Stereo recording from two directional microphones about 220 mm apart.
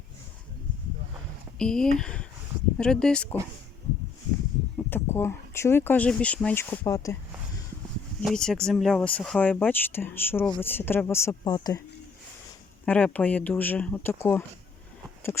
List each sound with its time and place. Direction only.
1.5 s speech: 5° left (ahead or behind)
4.8 s speech: 10° left (ahead or behind)
8.2 s speech: centre (ahead or behind)
12.8 s speech: 5° left (ahead or behind)